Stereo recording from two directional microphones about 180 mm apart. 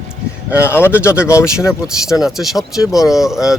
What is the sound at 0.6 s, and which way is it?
Speech, 15° left (ahead or behind).